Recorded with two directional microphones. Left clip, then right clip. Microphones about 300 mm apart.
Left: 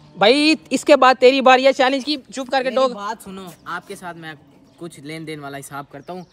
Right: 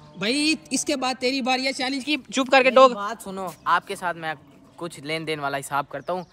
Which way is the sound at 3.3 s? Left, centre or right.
Centre.